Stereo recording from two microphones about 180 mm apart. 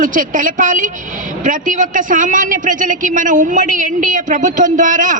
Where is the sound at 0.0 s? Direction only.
45° right (ahead or behind).